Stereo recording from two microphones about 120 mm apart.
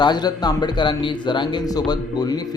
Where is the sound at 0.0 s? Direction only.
35° left (ahead or behind).